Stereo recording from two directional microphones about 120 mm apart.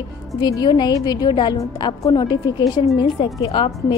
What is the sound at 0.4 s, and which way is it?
A woman's voice, 35° left (ahead or behind).